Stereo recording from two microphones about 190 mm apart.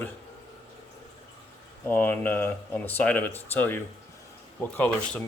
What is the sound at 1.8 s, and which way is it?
Speech, 10° left (ahead or behind).